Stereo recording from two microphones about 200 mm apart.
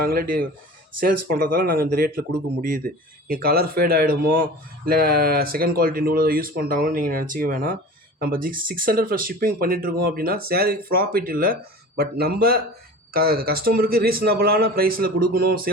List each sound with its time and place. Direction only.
0.0 s speech: 45° right (ahead or behind)